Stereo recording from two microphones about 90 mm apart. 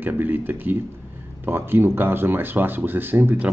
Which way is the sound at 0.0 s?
20° right (ahead or behind).